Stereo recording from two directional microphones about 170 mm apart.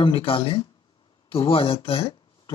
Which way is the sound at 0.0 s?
30° left (ahead or behind).